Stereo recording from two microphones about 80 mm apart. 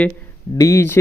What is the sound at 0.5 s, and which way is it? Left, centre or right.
Speech, left.